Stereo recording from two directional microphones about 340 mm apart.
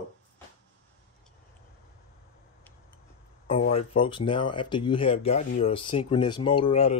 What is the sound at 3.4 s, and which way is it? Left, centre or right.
Speech, centre.